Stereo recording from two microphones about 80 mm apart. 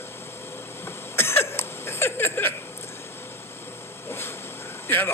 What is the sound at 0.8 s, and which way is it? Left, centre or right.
Cough, left.